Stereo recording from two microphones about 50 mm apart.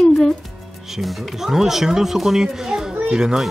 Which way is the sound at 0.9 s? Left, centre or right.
Centre.